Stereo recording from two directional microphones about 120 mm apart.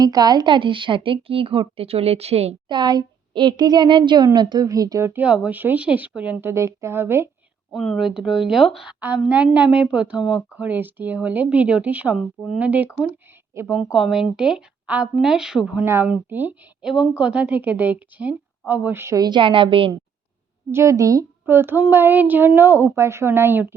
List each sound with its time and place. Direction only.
0.0 s speech: 30° right (ahead or behind); by 2.6 s 60° right (ahead or behind)
2.6 s a woman's voice: 35° right (ahead or behind); by 7.3 s 20° right (ahead or behind)
7.7 s speech: centre (ahead or behind)
8.9 s a woman's voice: 10° right (ahead or behind)
13.9 s speech: 5° right (ahead or behind)
15.8 s a woman's voice: 20° right (ahead or behind)
16.8 s a woman's voice: centre (ahead or behind); by 19.2 s 20° right (ahead or behind)
19.2 s speech: 40° right (ahead or behind)
20.7 s speech: 25° right (ahead or behind)